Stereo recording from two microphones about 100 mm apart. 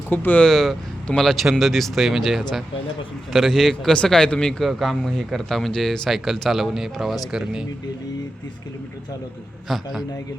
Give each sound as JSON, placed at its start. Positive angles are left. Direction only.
{"t": 0.1, "sound": "speech", "side_deg": 20}
{"t": 0.4, "sound": "a man's voice", "side_deg": 5}
{"t": 9.6, "sound": "a man's voice", "side_deg": 0}